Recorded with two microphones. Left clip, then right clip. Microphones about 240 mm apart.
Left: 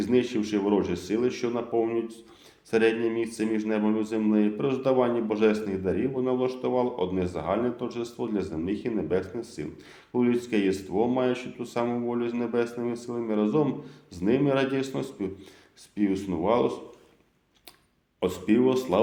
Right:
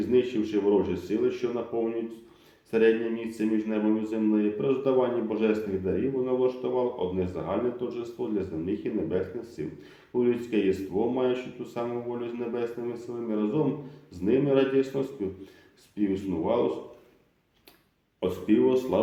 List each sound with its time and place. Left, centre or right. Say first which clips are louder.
0.0 s a man's voice: right 1 dB; left
18.2 s a man's voice: even; left